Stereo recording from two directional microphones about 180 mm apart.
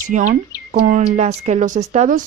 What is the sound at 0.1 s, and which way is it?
Speech, 45° right (ahead or behind).